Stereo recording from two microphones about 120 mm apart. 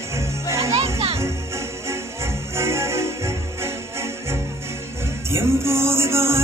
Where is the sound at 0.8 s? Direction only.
55° right (ahead or behind).